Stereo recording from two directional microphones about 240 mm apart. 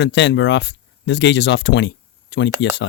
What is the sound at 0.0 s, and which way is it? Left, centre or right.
Speech, left.